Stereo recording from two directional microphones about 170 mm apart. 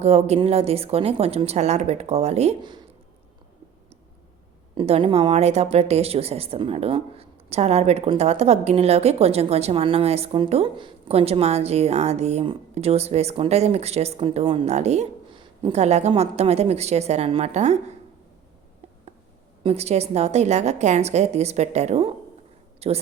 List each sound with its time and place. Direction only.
0.0 s speech: 40° right (ahead or behind)
2.6 s speech: 25° right (ahead or behind)
4.7 s speech: 30° right (ahead or behind)
15.3 s speech: 30° right (ahead or behind)
19.6 s a woman's voice: 40° right (ahead or behind)